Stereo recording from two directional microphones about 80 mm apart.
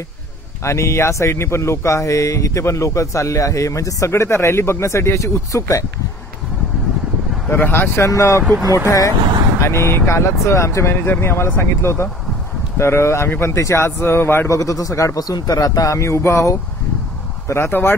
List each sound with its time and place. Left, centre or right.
0.7 s speech: left
7.4 s speech: left
8.1 s speech: left
14.5 s speech: left